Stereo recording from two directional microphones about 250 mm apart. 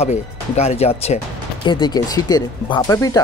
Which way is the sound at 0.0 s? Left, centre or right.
Left.